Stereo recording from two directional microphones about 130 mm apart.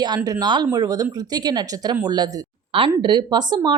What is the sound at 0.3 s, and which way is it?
A woman's voice, 30° right (ahead or behind).